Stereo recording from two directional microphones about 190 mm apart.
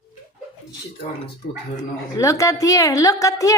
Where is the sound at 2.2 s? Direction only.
15° left (ahead or behind).